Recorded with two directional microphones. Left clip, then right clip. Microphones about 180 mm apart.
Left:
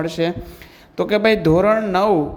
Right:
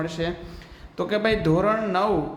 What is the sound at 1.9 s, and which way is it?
Speech, 40° left (ahead or behind).